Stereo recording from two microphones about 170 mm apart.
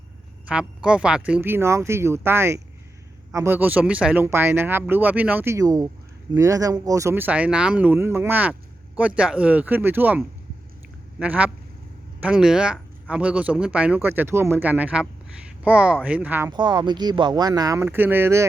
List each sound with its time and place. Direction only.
0.4 s speech: 5° right (ahead or behind)
16.5 s speech: 25° right (ahead or behind)